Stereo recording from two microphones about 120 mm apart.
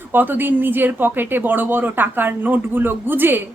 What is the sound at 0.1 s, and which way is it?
Speech, 15° right (ahead or behind).